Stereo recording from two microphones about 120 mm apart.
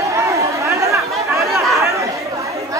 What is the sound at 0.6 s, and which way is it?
Chatter, 25° right (ahead or behind).